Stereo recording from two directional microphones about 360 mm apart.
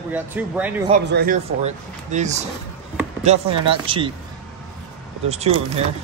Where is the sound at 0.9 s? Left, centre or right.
Right.